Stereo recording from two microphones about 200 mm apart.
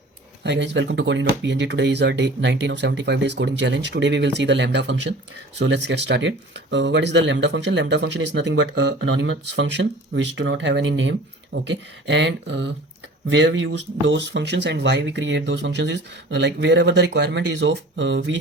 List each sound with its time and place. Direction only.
0.4 s speech: 60° right (ahead or behind)